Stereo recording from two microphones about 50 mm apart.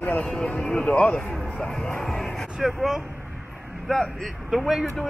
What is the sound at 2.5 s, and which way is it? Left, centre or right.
Speech, centre.